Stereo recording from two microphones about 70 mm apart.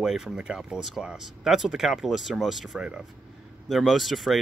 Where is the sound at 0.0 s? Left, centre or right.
Centre.